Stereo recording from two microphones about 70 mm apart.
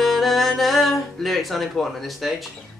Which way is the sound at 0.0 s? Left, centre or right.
Centre.